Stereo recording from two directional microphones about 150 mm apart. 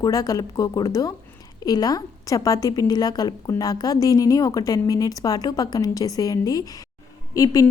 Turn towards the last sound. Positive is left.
turn(degrees=25)  # may be behind; listen again after turning